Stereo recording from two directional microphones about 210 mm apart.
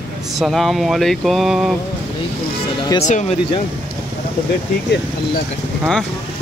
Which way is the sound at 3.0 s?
35° left (ahead or behind).